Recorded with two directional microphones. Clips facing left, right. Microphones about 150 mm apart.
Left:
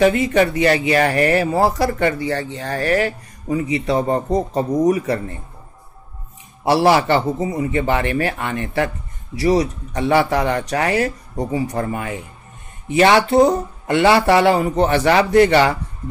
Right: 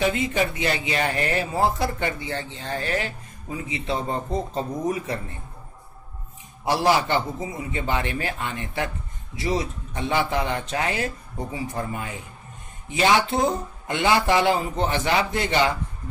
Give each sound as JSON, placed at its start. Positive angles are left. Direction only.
{"t": 0.0, "sound": "speech", "side_deg": 70}
{"t": 6.6, "sound": "speech", "side_deg": 75}